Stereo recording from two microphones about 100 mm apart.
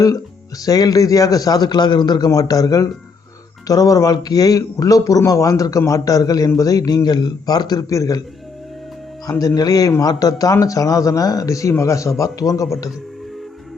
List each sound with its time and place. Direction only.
0.6 s a man's voice: 35° left (ahead or behind)
9.6 s a man's voice: 35° left (ahead or behind)